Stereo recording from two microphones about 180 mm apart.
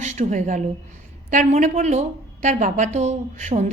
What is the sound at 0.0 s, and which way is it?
A woman's voice, 40° right (ahead or behind).